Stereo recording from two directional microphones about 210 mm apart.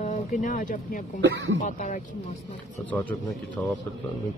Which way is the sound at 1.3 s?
60° right (ahead or behind).